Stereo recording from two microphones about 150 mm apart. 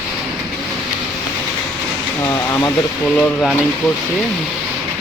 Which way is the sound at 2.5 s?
20° left (ahead or behind).